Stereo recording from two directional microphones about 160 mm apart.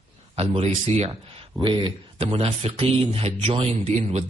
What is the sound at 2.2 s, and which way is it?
Speech, 40° right (ahead or behind).